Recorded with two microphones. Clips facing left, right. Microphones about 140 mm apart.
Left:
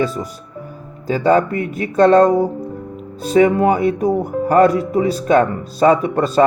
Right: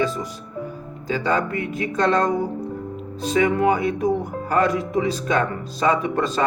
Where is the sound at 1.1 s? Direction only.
40° left (ahead or behind).